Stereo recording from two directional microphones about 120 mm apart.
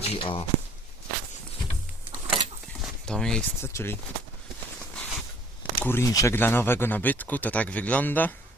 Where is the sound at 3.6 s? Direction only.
20° left (ahead or behind).